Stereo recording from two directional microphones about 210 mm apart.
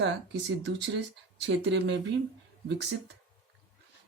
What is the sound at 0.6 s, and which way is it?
Speech, 55° right (ahead or behind).